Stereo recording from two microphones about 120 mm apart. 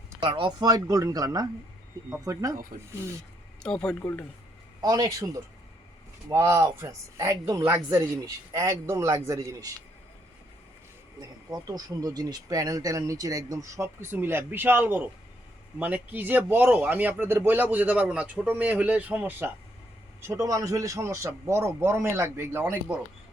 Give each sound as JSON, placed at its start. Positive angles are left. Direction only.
{"t": 0.2, "sound": "speech", "side_deg": -45}
{"t": 3.6, "sound": "speech", "side_deg": 5}
{"t": 4.0, "sound": "speech", "side_deg": 15}
{"t": 4.8, "sound": "speech", "side_deg": -30}
{"t": 11.2, "sound": "speech", "side_deg": -30}
{"t": 20.2, "sound": "speech", "side_deg": -30}